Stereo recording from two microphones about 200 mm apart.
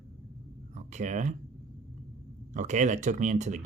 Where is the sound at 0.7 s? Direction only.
35° right (ahead or behind).